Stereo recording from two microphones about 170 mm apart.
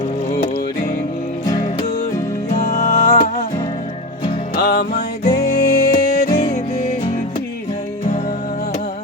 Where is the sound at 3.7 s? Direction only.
30° left (ahead or behind).